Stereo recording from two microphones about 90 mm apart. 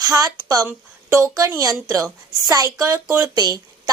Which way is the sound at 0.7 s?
30° right (ahead or behind).